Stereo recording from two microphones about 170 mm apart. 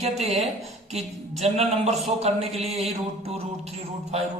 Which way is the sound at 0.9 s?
40° right (ahead or behind).